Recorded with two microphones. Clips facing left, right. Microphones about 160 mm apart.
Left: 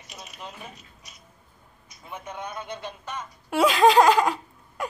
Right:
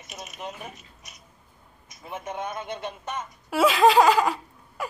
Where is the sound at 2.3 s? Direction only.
20° right (ahead or behind).